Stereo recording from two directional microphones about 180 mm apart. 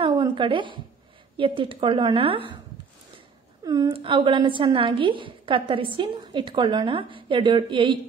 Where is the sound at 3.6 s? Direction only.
20° right (ahead or behind).